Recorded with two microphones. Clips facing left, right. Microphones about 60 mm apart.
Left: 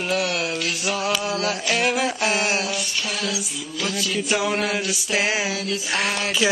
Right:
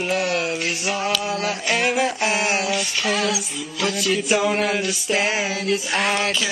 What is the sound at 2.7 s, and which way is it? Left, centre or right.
Music, right.